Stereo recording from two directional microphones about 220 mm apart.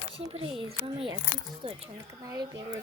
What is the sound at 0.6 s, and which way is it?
A woman's voice, 25° right (ahead or behind).